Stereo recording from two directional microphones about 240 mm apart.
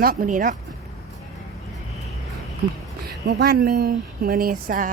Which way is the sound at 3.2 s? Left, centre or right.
Right.